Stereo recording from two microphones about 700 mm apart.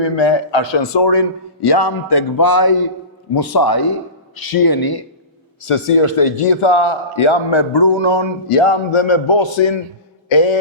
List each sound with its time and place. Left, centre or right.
0.0 s a man's voice: left
5.6 s a man's voice: left